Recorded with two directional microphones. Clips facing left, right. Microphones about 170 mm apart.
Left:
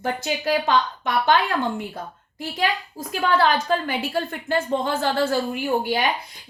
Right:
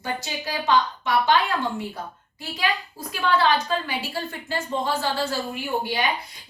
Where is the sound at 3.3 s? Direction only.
50° left (ahead or behind).